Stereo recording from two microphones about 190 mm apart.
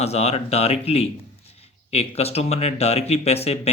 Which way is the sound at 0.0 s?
35° left (ahead or behind).